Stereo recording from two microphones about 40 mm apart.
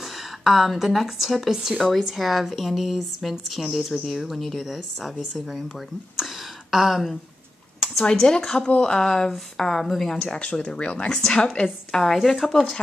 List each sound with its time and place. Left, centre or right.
0.4 s speech: centre
6.7 s speech: centre
8.0 s speech: centre
8.6 s speech: left
9.6 s speech: centre
10.2 s speech: left
11.9 s speech: centre